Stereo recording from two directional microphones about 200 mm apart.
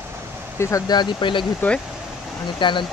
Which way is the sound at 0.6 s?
15° left (ahead or behind).